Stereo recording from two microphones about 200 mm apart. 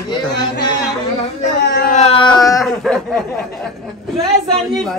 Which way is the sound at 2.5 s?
Centre (ahead or behind).